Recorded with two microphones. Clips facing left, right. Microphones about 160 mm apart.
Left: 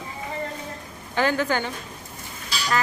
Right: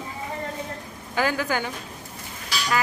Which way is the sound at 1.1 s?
5° right (ahead or behind).